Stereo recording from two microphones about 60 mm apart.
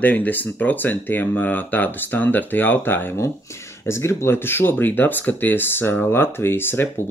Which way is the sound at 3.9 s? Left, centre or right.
Left.